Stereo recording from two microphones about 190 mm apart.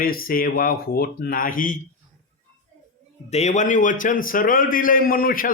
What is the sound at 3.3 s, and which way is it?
A man's voice, 35° left (ahead or behind).